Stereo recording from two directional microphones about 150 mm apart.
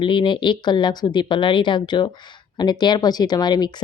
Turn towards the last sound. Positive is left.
turn(degrees=30)  # may be behind; listen again after turning